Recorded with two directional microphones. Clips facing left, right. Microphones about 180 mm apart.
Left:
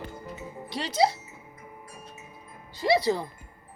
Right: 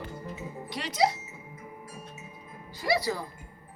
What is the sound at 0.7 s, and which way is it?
Speech, 30° left (ahead or behind).